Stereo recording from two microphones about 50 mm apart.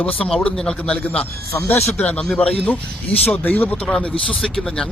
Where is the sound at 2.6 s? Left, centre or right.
Left.